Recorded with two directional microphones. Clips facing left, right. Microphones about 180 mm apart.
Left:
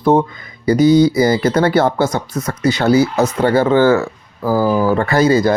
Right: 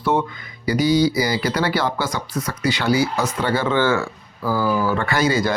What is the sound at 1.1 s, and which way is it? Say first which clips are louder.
Speech: left 7 dB; 50° left (ahead or behind).